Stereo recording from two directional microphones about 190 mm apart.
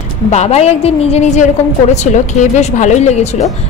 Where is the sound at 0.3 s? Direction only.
35° left (ahead or behind).